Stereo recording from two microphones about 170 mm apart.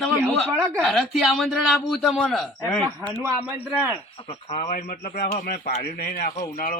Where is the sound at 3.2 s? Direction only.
10° right (ahead or behind).